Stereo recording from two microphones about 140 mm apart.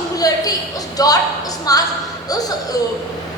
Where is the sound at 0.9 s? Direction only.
25° left (ahead or behind).